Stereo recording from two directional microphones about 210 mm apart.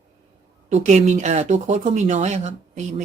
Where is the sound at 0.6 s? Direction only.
35° right (ahead or behind).